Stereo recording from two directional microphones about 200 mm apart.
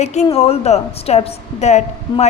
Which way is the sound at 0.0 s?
35° left (ahead or behind).